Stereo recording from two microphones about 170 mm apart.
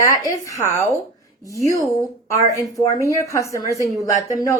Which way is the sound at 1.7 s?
20° right (ahead or behind).